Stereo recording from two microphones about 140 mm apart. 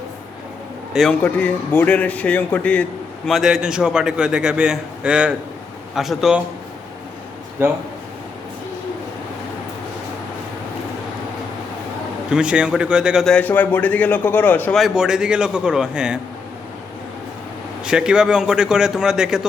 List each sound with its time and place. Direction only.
1.2 s speech: 10° left (ahead or behind)
3.2 s a man's voice: centre (ahead or behind)
7.6 s speech: 15° right (ahead or behind)
12.3 s speech: 5° right (ahead or behind)
13.3 s speech: 10° left (ahead or behind)
14.8 s a man's voice: 5° right (ahead or behind)
17.8 s a man's voice: 5° right (ahead or behind)